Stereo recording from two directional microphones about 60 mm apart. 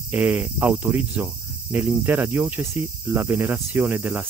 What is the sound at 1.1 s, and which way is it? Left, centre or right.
Cricket, right.